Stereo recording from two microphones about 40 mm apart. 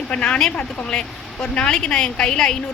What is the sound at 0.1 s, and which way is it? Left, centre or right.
A woman's voice, left.